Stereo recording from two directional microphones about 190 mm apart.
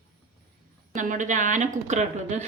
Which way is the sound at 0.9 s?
40° right (ahead or behind).